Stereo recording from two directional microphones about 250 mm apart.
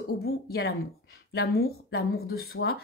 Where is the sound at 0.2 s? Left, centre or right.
Left.